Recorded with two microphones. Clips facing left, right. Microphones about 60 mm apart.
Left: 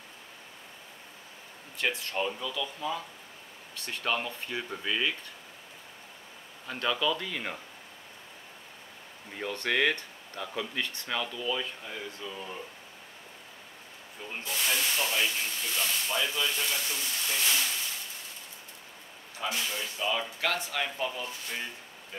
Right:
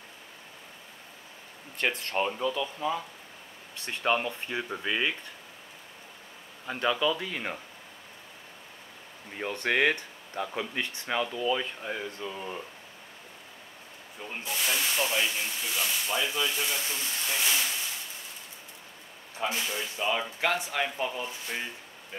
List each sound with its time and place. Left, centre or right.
1.8 s speech: right
6.7 s speech: centre
9.3 s speech: centre
14.4 s speech: centre
19.4 s speech: right